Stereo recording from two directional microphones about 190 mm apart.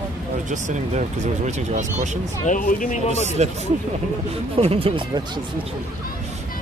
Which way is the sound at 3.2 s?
35° right (ahead or behind).